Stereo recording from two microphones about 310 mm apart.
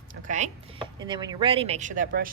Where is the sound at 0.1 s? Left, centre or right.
Right.